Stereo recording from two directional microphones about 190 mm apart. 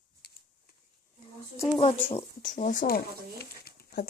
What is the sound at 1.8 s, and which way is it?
Speech, 35° left (ahead or behind).